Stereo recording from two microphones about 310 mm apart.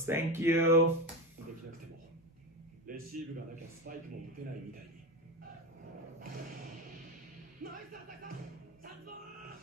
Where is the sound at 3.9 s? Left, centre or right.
Right.